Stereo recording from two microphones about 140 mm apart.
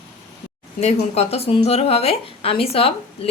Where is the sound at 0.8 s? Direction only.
50° left (ahead or behind).